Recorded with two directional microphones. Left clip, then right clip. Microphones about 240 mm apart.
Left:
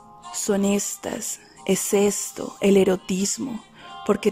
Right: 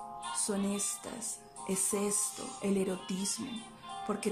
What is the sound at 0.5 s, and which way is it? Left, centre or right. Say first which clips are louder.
Speech: left 17 dB; left.